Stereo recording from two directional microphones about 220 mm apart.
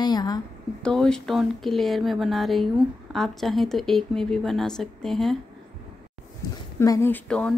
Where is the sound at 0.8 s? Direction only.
5° left (ahead or behind).